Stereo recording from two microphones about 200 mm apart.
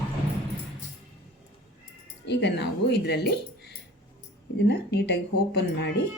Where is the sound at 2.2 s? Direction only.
60° left (ahead or behind).